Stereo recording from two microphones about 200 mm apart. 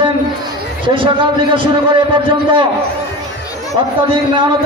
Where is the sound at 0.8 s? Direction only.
25° right (ahead or behind).